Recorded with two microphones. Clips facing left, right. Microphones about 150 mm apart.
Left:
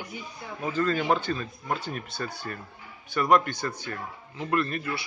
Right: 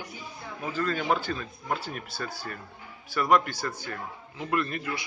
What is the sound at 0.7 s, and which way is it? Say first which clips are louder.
A man's voice: left 3 dB; 5° right (ahead or behind).